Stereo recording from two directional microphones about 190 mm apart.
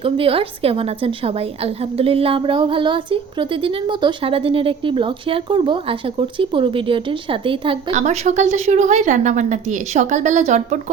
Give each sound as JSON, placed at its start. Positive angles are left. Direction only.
{"t": 0.0, "sound": "a woman's voice", "side_deg": -30}